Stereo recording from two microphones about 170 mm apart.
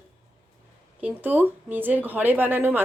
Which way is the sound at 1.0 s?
10° right (ahead or behind).